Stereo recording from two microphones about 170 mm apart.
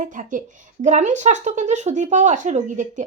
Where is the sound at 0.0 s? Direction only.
50° right (ahead or behind).